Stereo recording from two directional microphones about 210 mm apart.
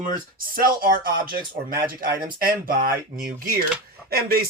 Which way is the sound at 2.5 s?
45° right (ahead or behind).